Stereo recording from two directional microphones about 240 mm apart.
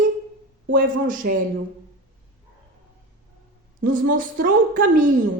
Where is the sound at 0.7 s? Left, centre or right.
Right.